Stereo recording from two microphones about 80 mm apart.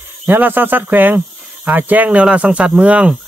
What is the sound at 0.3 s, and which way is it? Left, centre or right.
Speech, right.